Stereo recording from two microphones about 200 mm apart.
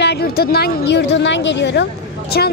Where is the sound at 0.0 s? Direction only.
55° left (ahead or behind).